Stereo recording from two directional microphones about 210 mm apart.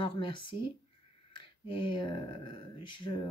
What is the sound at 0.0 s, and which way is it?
Speech, 25° left (ahead or behind).